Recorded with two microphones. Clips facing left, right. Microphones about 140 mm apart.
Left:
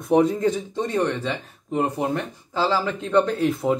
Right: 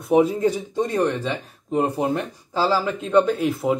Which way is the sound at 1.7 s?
20° right (ahead or behind).